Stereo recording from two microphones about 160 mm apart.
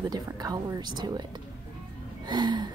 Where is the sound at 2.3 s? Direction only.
30° right (ahead or behind).